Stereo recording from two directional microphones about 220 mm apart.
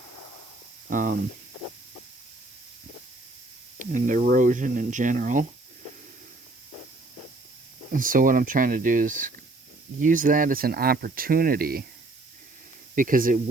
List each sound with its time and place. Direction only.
0.9 s speech: 35° right (ahead or behind)
3.8 s speech: 35° right (ahead or behind)
7.9 s speech: 40° right (ahead or behind)
13.0 s speech: 40° right (ahead or behind)